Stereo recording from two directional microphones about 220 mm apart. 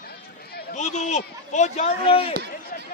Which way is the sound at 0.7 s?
30° left (ahead or behind).